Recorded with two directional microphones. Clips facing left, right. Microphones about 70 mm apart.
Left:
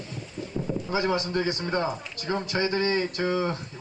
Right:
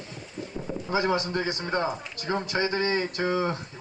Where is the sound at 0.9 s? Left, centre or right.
Right.